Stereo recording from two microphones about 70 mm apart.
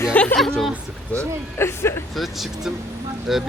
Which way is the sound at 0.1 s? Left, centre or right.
Left.